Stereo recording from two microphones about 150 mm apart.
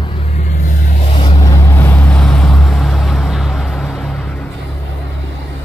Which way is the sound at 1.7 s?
10° left (ahead or behind).